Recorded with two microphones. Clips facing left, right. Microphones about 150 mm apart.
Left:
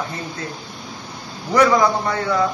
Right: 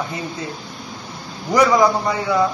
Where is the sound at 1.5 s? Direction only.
10° right (ahead or behind).